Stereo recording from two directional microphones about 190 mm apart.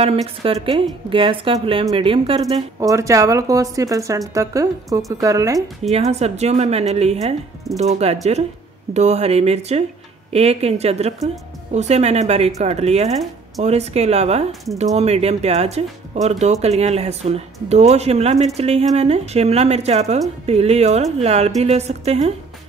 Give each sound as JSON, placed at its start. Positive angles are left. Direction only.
{"t": 0.0, "sound": "a woman's voice", "side_deg": -30}
{"t": 2.8, "sound": "speech", "side_deg": -15}
{"t": 5.9, "sound": "speech", "side_deg": -35}